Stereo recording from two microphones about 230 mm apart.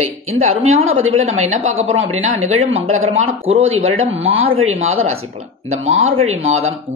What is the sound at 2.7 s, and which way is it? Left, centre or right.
Speech, right.